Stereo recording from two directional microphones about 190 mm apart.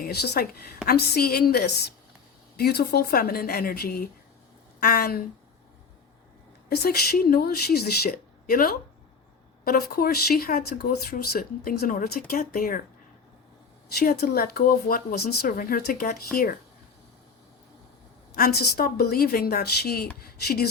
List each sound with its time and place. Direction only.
0.0 s speech: 55° left (ahead or behind)
6.7 s speech: 55° left (ahead or behind)
14.0 s speech: 55° left (ahead or behind)
18.3 s speech: 50° left (ahead or behind)